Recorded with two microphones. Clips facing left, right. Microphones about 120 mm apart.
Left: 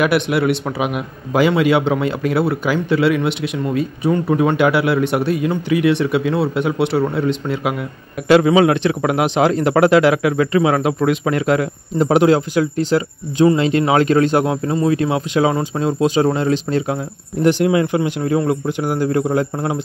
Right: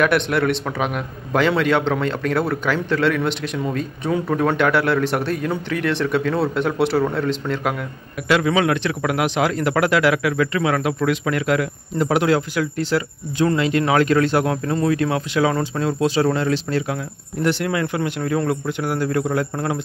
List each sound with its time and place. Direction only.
0.0 s a man's voice: 5° left (ahead or behind)
8.3 s speech: 30° left (ahead or behind)